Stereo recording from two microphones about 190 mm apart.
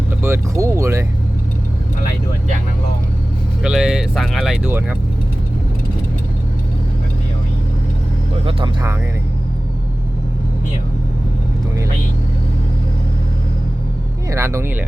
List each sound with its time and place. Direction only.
0.2 s speech: 15° right (ahead or behind)
3.6 s speech: 5° right (ahead or behind)
8.4 s speech: 30° right (ahead or behind)
14.3 s speech: 15° right (ahead or behind)